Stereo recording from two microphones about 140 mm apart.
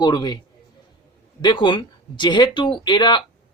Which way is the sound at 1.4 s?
35° left (ahead or behind).